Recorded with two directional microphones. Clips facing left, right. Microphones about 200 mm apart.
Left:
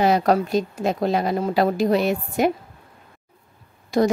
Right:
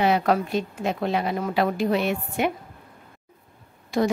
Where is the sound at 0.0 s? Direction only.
40° left (ahead or behind).